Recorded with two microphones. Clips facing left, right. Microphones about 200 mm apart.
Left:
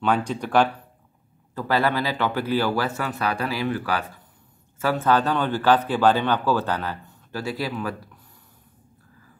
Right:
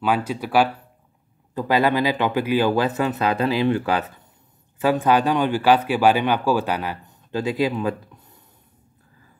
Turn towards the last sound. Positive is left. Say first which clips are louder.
# right 6 dB
turn(degrees=-20)  # may be behind; listen again after turning